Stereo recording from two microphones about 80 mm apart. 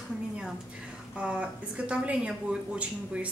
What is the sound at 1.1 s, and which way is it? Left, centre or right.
Speech, centre.